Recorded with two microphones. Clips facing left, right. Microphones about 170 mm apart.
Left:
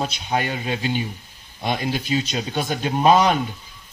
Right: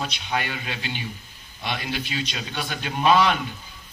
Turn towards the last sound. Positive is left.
turn(degrees=40)  # may be behind; listen again after turning